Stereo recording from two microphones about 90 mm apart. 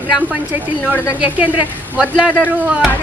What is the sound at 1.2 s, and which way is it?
A woman's voice, 15° right (ahead or behind).